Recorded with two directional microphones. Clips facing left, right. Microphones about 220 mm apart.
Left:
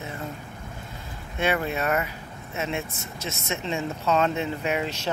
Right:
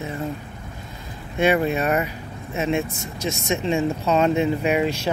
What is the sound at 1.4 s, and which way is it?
Speech, 15° right (ahead or behind).